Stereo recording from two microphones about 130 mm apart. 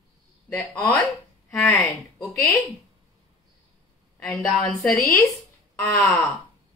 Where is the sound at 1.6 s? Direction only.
10° left (ahead or behind).